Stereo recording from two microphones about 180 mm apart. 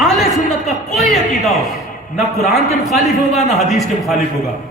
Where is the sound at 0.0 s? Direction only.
Centre (ahead or behind).